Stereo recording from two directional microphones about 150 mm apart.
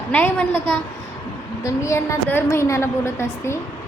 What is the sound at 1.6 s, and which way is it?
A woman's voice, 20° left (ahead or behind).